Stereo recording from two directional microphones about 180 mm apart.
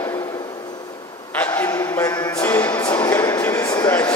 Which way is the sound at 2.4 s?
10° left (ahead or behind).